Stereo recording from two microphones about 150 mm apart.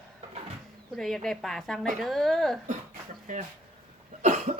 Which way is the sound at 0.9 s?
5° left (ahead or behind).